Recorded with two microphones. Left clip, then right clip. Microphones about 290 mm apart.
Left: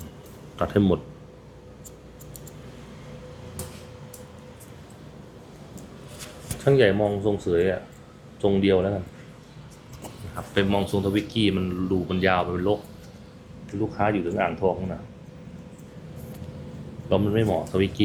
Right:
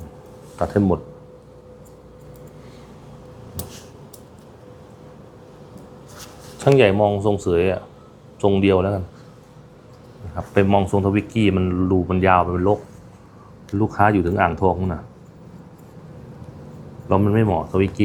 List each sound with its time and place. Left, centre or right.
0.6 s speech: centre
6.7 s speech: centre
10.5 s speech: centre
13.8 s speech: right
17.1 s speech: right
17.7 s speech: centre